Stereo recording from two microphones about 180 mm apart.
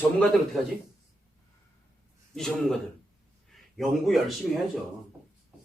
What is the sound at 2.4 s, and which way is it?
A man's voice, centre (ahead or behind).